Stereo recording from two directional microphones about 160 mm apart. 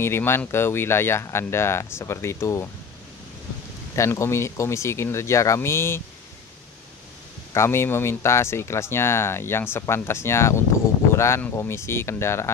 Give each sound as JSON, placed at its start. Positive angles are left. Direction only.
{"t": 0.0, "sound": "speech", "side_deg": 15}
{"t": 3.9, "sound": "speech", "side_deg": 15}
{"t": 7.5, "sound": "speech", "side_deg": 15}